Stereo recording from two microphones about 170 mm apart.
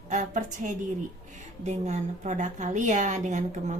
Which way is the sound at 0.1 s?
45° right (ahead or behind).